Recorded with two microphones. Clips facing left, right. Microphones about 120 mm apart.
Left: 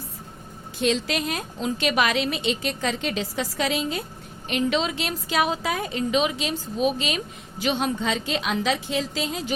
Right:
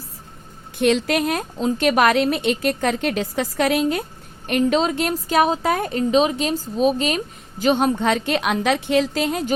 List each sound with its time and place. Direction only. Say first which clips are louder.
0.8 s a woman's voice: right 6 dB; 60° right (ahead or behind)
4.4 s a woman's voice: right 5 dB; 45° right (ahead or behind)